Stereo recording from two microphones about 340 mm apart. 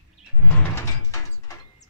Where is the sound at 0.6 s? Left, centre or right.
Centre.